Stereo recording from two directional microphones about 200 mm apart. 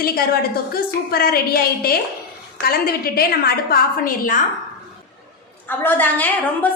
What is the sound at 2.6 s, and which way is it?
A woman's voice, 50° left (ahead or behind).